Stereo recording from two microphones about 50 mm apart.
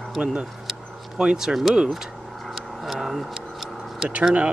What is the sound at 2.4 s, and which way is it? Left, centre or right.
Vehicle, centre.